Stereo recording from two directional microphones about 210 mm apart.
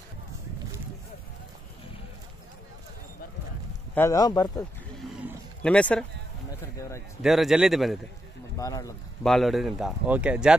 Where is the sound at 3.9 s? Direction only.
10° left (ahead or behind).